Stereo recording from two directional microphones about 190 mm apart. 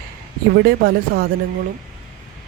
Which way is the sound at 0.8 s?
50° right (ahead or behind).